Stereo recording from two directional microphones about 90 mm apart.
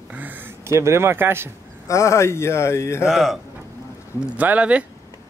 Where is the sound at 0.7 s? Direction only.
30° right (ahead or behind).